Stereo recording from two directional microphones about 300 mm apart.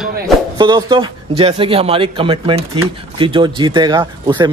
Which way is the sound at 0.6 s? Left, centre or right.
Centre.